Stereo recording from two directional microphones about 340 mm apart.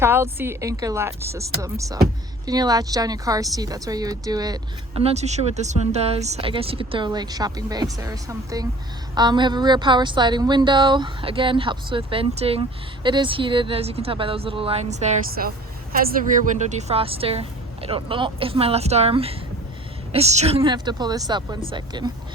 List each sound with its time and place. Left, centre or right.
0.0 s speech: centre